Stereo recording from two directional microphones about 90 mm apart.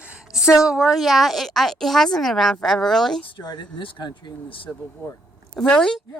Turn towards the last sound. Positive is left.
turn(degrees=10)  # may be behind; listen again after turning